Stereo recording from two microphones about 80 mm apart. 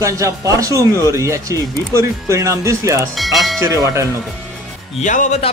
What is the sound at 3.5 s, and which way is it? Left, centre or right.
Speech, right.